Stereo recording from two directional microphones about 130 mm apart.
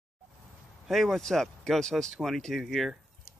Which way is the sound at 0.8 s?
Centre (ahead or behind).